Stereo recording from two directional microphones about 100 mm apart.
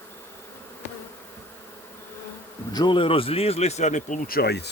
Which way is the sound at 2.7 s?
45° left (ahead or behind).